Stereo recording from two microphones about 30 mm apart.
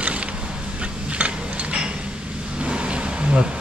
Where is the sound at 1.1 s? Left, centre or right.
Right.